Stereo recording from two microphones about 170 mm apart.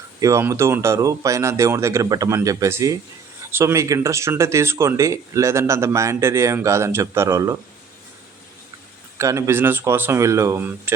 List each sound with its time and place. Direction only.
0.2 s speech: 20° right (ahead or behind)
9.1 s speech: 20° right (ahead or behind)